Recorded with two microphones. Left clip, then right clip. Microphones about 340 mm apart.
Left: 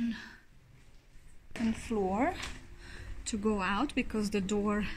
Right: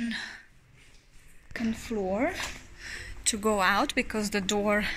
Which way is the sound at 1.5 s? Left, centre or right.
Centre.